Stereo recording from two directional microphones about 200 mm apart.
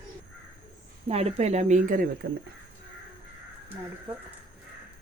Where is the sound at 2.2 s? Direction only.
55° right (ahead or behind).